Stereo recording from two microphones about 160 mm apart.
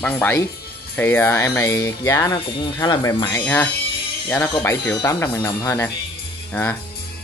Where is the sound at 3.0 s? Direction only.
20° left (ahead or behind).